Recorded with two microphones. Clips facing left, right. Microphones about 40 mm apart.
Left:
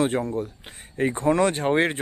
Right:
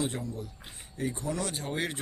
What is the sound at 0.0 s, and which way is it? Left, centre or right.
Speech, left.